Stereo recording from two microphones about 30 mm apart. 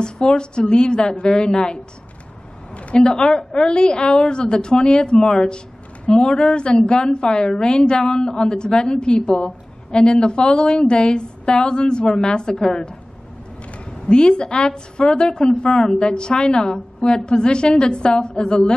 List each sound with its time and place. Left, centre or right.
0.0 s a woman's voice: left
2.7 s a sound: left
3.0 s a woman's voice: left